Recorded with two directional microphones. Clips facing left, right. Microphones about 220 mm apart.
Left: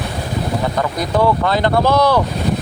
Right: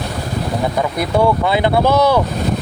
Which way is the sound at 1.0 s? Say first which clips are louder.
Right 1 dB; 10° right (ahead or behind).